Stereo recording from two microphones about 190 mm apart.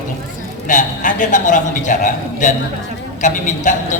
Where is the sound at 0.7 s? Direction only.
45° left (ahead or behind).